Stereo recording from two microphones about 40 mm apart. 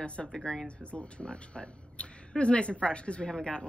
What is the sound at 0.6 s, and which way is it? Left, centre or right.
A woman's voice, left.